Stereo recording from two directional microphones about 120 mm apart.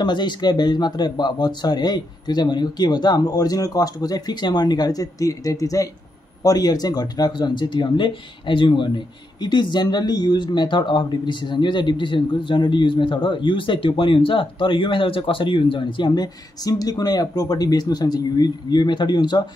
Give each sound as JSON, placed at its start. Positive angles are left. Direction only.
{"t": 0.0, "sound": "speech", "side_deg": 40}